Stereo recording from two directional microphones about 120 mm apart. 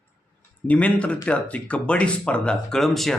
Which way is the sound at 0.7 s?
10° left (ahead or behind).